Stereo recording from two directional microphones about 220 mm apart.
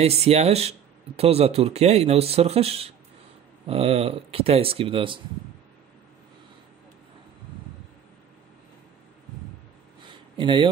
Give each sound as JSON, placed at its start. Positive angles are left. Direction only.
{"t": 0.0, "sound": "speech", "side_deg": -30}
{"t": 10.3, "sound": "speech", "side_deg": -20}